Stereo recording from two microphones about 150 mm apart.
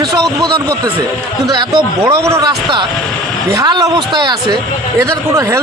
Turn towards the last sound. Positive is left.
turn(degrees=-20)  # may be behind; listen again after turning